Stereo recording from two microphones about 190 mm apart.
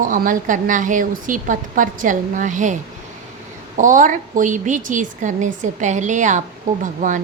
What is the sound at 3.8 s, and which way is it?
A woman's voice, 45° right (ahead or behind).